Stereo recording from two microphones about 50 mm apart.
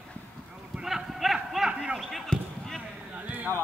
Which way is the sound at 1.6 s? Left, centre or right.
Centre.